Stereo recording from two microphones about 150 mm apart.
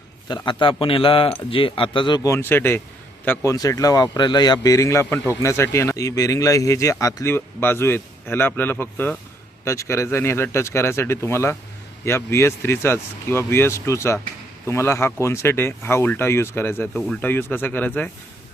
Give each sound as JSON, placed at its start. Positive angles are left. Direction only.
{"t": 0.3, "sound": "a man's voice", "side_deg": 30}
{"t": 2.3, "sound": "speech", "side_deg": 15}